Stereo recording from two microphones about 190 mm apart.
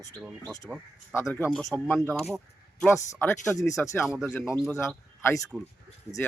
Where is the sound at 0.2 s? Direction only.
5° right (ahead or behind).